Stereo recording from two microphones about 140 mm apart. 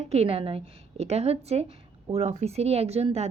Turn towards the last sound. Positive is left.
turn(degrees=-45)  # may be behind; listen again after turning